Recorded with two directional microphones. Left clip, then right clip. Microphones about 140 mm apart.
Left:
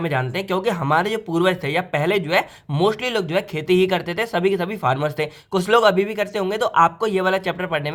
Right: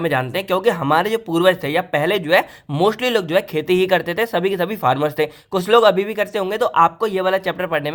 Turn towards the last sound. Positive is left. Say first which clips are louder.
# right 3 dB
turn(degrees=-25)  # may be behind; listen again after turning